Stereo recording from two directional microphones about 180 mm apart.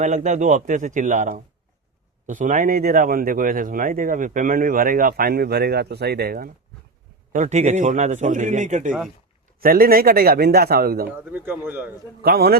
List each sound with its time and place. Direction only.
0.0 s speech: 45° right (ahead or behind)
7.3 s speech: 40° right (ahead or behind)
9.6 s a man's voice: 55° right (ahead or behind)
11.3 s speech: 10° right (ahead or behind)
12.2 s a man's voice: 60° right (ahead or behind)